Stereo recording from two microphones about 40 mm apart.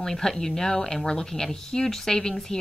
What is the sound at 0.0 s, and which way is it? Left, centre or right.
A woman's voice, centre.